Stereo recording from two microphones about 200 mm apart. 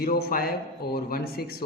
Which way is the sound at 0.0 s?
50° left (ahead or behind).